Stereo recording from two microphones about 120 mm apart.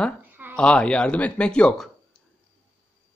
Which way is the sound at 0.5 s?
10° left (ahead or behind).